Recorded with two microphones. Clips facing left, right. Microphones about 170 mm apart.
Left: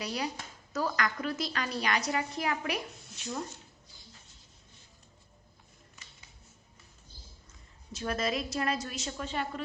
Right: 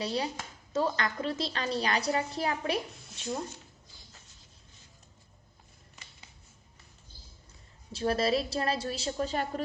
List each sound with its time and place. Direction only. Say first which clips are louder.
0.0 s a woman's voice: right 3 dB; 30° right (ahead or behind)
7.9 s a woman's voice: right 5 dB; 30° right (ahead or behind)